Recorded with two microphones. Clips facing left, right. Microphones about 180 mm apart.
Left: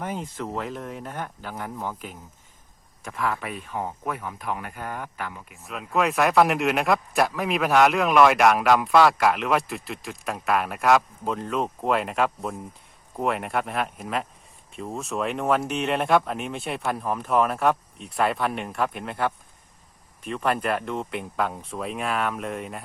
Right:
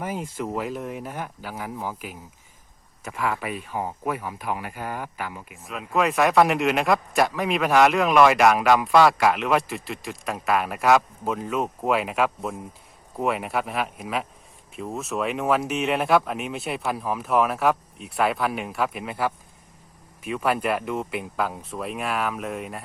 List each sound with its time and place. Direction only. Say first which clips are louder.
0.0 s speech: right 2 dB; 5° right (ahead or behind)